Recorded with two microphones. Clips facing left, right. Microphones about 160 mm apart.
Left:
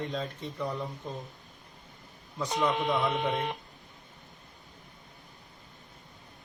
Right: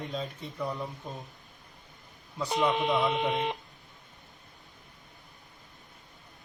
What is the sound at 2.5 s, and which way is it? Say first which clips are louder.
Speech: right 1 dB; 20° right (ahead or behind).